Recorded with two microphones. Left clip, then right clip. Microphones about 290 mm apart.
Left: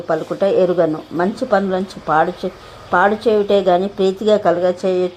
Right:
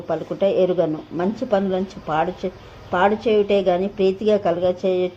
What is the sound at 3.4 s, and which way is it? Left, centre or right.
Speech, left.